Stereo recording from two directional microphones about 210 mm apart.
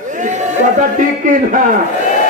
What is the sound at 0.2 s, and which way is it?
A man's voice, 35° right (ahead or behind).